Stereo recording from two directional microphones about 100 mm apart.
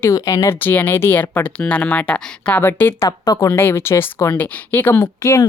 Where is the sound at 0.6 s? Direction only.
20° left (ahead or behind).